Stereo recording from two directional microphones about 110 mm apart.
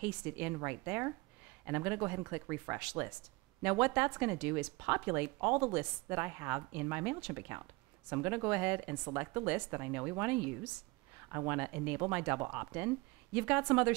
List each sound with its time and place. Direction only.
0.0 s speech: 15° right (ahead or behind)